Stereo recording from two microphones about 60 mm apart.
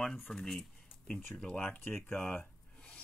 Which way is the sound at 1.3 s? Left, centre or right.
Centre.